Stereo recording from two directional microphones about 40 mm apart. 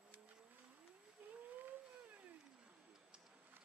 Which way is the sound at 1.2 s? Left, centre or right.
Right.